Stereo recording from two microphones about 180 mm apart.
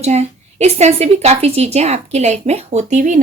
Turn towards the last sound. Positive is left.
turn(degrees=-45)  # may be behind; listen again after turning